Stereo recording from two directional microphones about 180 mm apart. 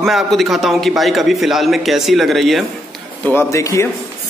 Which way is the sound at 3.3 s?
15° left (ahead or behind).